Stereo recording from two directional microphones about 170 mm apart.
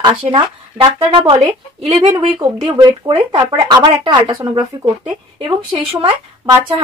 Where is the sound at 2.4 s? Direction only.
30° right (ahead or behind).